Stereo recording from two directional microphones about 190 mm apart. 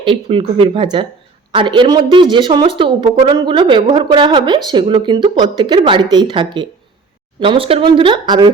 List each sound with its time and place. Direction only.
0.0 s speech: 25° right (ahead or behind)